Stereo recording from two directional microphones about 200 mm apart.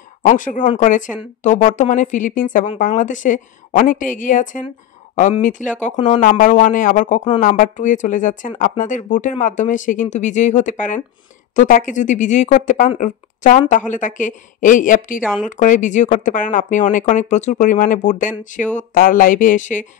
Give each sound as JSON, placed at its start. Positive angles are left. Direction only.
{"t": 0.2, "sound": "speech", "side_deg": 40}